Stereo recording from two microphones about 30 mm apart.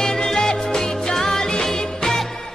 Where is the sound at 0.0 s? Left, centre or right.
Centre.